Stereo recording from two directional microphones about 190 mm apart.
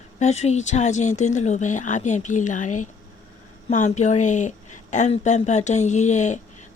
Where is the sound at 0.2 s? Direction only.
35° left (ahead or behind).